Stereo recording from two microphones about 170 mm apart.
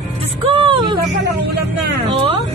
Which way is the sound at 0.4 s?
30° right (ahead or behind).